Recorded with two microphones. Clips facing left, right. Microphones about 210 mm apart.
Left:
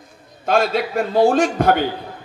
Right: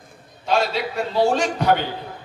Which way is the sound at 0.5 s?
50° left (ahead or behind).